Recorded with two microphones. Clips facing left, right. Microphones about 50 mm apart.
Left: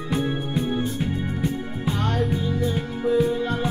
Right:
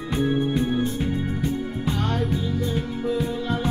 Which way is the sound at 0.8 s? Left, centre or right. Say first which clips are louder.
Right 1 dB; left.